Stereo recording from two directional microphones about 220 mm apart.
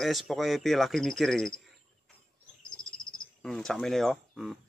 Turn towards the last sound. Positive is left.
turn(degrees=0)  # may be behind; listen again after turning